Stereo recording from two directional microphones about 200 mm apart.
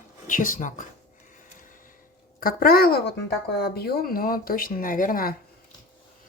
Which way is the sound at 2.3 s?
45° left (ahead or behind).